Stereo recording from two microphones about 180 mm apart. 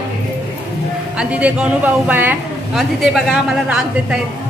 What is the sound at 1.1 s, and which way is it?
A man's voice, 5° right (ahead or behind).